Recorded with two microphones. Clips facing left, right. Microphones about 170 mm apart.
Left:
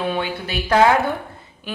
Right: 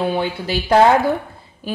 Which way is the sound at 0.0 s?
30° right (ahead or behind).